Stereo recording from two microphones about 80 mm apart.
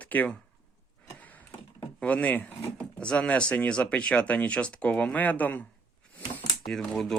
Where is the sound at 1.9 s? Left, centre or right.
Centre.